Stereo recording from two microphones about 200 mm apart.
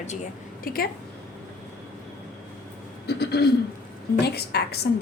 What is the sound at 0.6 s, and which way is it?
Speech, 50° left (ahead or behind).